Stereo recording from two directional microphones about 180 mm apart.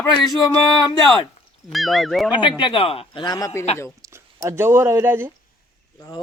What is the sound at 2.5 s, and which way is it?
A man's voice, 30° left (ahead or behind).